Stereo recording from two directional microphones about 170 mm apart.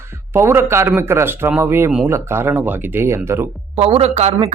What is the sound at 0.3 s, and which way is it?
A man's voice, 15° right (ahead or behind).